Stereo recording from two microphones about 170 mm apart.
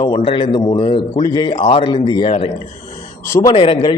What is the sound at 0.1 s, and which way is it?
A man's voice, 35° left (ahead or behind).